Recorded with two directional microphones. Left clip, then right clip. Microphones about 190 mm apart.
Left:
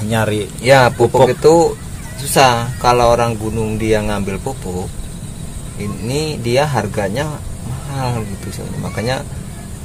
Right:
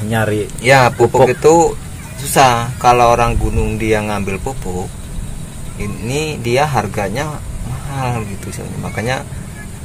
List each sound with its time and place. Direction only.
0.1 s speech: 5° right (ahead or behind)
0.6 s speech: 5° left (ahead or behind)
6.0 s speech: 15° left (ahead or behind)
7.9 s speech: 10° left (ahead or behind)